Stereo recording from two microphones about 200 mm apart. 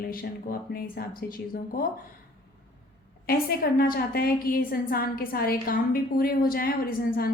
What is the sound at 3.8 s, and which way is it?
A woman's voice, 50° left (ahead or behind).